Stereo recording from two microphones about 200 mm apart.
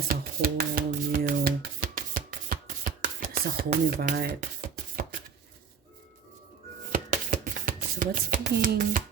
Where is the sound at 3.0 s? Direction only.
45° right (ahead or behind).